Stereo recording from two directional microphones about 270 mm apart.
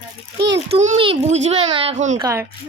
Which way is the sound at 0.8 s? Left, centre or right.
Right.